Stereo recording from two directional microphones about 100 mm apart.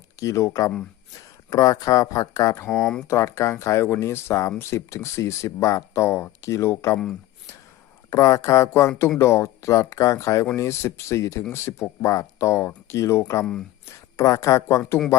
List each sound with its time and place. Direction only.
0.2 s speech: 30° left (ahead or behind)
2.6 s speech: 5° left (ahead or behind)
3.1 s speech: 30° left (ahead or behind)
8.1 s speech: 35° left (ahead or behind)
13.4 s speech: 5° left (ahead or behind)
13.8 s speech: 35° left (ahead or behind)